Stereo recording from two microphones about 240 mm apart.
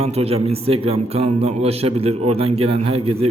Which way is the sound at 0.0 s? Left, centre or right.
Right.